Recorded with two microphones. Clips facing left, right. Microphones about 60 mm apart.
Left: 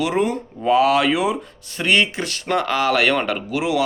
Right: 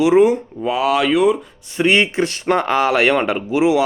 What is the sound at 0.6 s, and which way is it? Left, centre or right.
Speech, centre.